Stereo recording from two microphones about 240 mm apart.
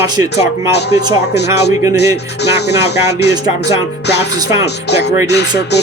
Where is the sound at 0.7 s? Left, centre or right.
Left.